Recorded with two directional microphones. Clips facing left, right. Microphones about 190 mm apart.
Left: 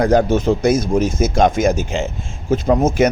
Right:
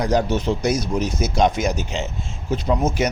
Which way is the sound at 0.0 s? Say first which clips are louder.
Left 6 dB; 50° left (ahead or behind).